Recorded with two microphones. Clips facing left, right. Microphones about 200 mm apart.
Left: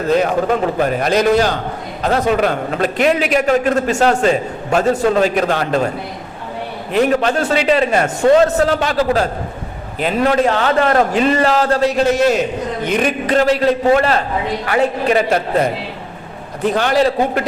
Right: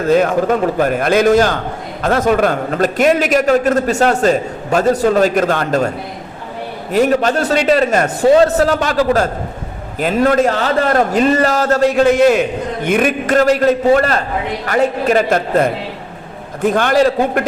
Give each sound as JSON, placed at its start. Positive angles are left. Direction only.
{"t": 0.2, "sound": "a man's voice", "side_deg": -45}
{"t": 7.1, "sound": "a man's voice", "side_deg": -40}